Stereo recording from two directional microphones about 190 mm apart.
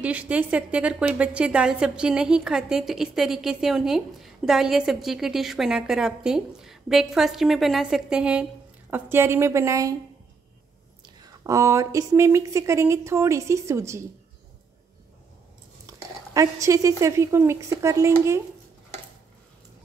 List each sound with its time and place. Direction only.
0.0 s a woman's voice: 5° right (ahead or behind)
11.1 s speech: 20° right (ahead or behind)
15.9 s a woman's voice: 15° right (ahead or behind)